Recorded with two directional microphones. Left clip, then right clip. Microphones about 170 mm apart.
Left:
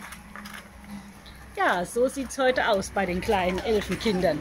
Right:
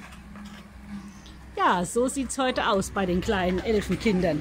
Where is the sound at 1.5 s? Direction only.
35° right (ahead or behind).